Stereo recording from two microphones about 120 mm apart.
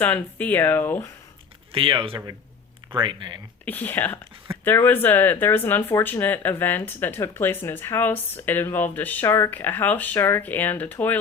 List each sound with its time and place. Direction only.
0.0 s speech: 15° left (ahead or behind)
1.7 s speech: 45° right (ahead or behind)
3.7 s speech: 15° left (ahead or behind)